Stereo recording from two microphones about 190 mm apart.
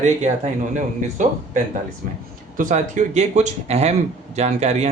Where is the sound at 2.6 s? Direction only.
40° right (ahead or behind).